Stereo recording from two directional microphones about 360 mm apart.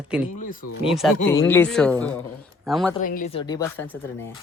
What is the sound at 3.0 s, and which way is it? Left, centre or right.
A woman's voice, left.